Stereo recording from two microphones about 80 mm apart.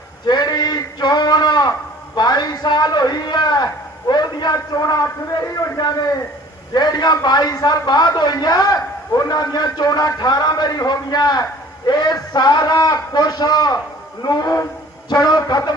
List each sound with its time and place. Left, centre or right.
0.3 s a sound: left
4.5 s a man's voice: left
5.4 s a man's voice: left
6.7 s a man's voice: left